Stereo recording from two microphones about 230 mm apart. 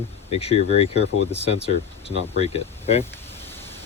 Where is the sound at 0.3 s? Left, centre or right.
Left.